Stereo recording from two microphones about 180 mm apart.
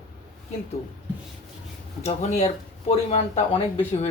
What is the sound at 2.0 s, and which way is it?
Speech, 40° left (ahead or behind).